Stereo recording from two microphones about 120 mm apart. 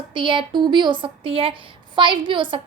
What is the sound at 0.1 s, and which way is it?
A woman's voice, 45° right (ahead or behind).